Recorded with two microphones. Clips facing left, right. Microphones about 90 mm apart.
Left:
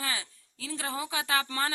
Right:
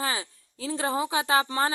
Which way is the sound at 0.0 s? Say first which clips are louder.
Right 5 dB; 30° right (ahead or behind).